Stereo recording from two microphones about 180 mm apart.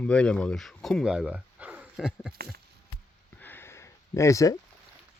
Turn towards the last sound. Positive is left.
turn(degrees=15)  # may be behind; listen again after turning